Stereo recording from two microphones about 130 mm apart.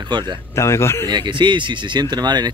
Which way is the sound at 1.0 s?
35° right (ahead or behind).